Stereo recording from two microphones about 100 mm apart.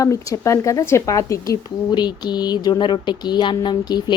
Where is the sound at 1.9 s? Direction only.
45° left (ahead or behind).